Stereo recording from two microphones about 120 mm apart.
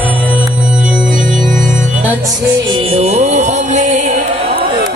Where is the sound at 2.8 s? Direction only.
60° right (ahead or behind); by 4.1 s 85° right.